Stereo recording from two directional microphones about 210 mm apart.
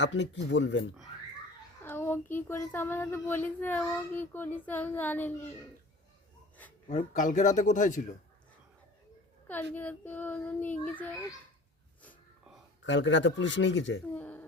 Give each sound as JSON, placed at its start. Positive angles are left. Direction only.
{"t": 0.0, "sound": "speech", "side_deg": 60}
{"t": 1.8, "sound": "speech", "side_deg": 10}
{"t": 6.8, "sound": "speech", "side_deg": 40}
{"t": 9.7, "sound": "speech", "side_deg": 10}
{"t": 12.8, "sound": "speech", "side_deg": 60}
{"t": 14.2, "sound": "speech", "side_deg": 10}